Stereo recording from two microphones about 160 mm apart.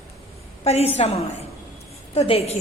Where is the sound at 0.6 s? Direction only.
40° left (ahead or behind).